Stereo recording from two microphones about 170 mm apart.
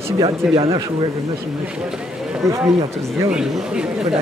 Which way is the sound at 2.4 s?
15° right (ahead or behind).